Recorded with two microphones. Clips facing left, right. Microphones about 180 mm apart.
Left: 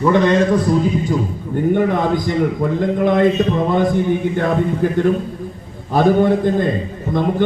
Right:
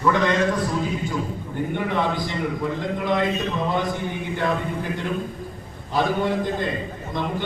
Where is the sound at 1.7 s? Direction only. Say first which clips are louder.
Left 5 dB; 45° left (ahead or behind).